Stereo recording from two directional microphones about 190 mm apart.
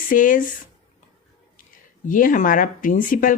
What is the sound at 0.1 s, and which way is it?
Speech, 45° left (ahead or behind).